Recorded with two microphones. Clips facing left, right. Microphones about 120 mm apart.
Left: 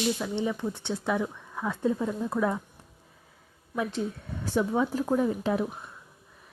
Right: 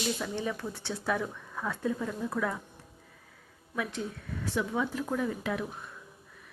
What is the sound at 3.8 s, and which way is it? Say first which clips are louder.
Speech: left 5 dB; 30° left (ahead or behind).